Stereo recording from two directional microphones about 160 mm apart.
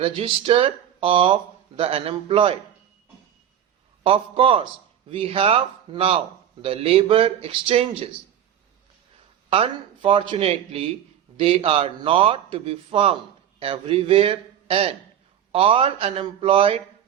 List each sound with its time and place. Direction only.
0.0 s a man's voice: 35° right (ahead or behind)
4.0 s a man's voice: 35° right (ahead or behind)
9.5 s a man's voice: 35° right (ahead or behind)